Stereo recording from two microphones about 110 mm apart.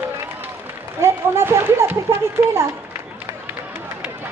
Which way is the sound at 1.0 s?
25° right (ahead or behind).